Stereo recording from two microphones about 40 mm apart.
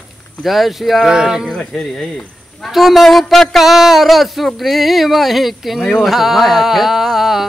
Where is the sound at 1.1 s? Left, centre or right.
Centre.